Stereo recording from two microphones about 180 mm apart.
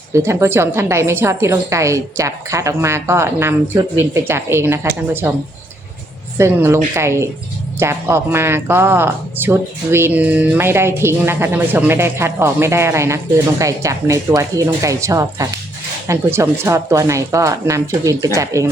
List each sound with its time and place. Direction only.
0.1 s speech: 15° right (ahead or behind)
6.3 s speech: 15° right (ahead or behind)